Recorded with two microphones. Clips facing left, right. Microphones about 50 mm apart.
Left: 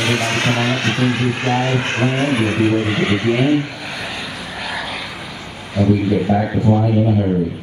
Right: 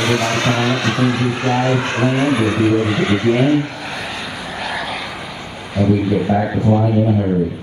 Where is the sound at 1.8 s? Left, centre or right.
Left.